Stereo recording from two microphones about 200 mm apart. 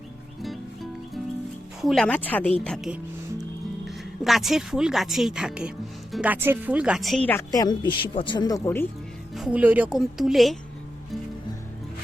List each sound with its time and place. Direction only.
0.4 s music: centre (ahead or behind)
1.8 s a woman's voice: centre (ahead or behind)
7.3 s speech: 15° left (ahead or behind)
9.3 s a woman's voice: 5° right (ahead or behind)